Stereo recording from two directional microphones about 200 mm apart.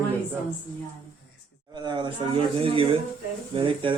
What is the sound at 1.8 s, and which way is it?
Speech, 20° right (ahead or behind).